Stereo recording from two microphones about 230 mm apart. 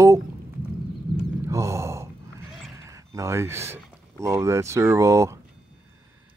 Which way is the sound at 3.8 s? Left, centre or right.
Centre.